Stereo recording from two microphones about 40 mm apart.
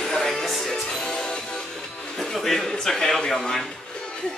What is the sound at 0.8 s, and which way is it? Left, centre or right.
Music, centre.